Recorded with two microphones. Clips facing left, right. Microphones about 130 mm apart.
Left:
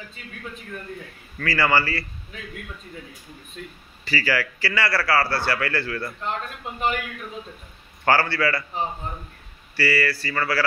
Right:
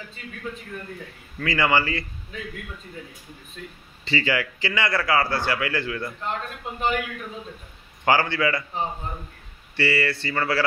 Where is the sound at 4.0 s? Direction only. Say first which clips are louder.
Even; 25° right (ahead or behind).